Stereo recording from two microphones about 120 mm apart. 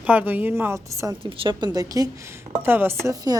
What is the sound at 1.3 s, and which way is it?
A woman's voice, 45° right (ahead or behind).